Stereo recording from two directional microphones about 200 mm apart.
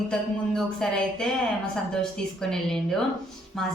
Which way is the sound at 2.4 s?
5° left (ahead or behind).